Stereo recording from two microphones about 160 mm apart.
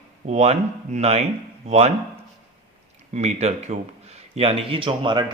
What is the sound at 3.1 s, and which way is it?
A man's voice, 45° right (ahead or behind).